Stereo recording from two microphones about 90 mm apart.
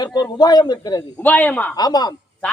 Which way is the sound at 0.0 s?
50° left (ahead or behind).